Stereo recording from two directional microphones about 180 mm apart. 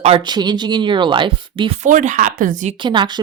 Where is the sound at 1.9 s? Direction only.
45° right (ahead or behind).